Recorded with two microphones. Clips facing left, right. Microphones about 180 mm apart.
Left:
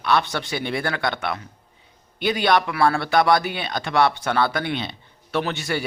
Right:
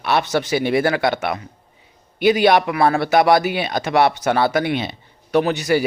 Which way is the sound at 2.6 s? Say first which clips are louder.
Right 3 dB; 20° right (ahead or behind).